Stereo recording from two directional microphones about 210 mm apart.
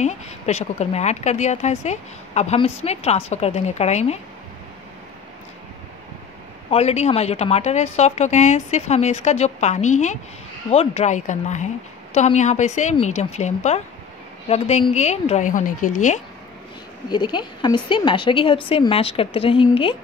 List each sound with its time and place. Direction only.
0.0 s a woman's voice: 30° left (ahead or behind)
6.7 s a woman's voice: 30° left (ahead or behind)
17.1 s a woman's voice: 20° left (ahead or behind)